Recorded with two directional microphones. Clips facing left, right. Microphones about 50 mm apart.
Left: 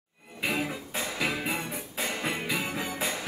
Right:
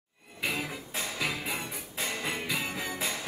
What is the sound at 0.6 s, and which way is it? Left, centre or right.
Music, left.